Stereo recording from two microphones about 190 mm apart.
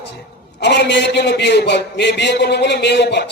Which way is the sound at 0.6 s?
65° left (ahead or behind).